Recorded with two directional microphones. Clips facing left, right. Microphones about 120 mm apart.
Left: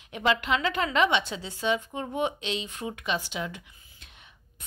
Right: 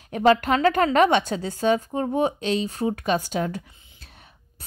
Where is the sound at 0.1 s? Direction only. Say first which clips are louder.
Right 7 dB; 45° right (ahead or behind).